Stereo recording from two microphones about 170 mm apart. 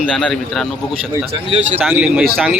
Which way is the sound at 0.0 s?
5° left (ahead or behind).